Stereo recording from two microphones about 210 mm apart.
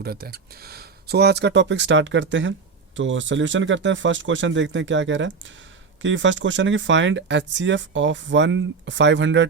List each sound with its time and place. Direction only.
0.0 s speech: 45° right (ahead or behind)